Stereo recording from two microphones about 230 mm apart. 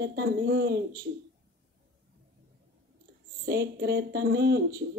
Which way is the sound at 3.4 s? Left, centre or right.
Right.